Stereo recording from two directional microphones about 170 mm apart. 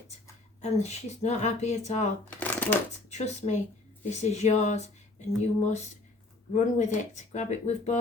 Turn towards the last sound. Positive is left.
turn(degrees=45)  # may be behind; listen again after turning